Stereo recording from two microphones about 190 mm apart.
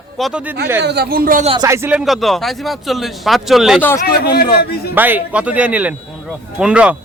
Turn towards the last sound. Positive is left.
turn(degrees=-5)  # may be behind; listen again after turning